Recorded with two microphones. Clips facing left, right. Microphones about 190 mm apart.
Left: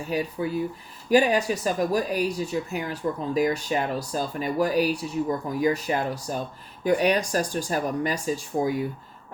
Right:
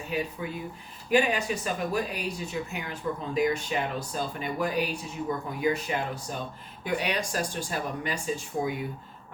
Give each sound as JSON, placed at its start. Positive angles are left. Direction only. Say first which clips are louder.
{"t": 0.1, "sound": "speech", "louder": "left 5 dB", "side_deg": 35}